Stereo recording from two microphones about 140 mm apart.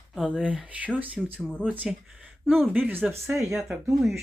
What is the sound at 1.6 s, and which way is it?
Speech, 10° right (ahead or behind).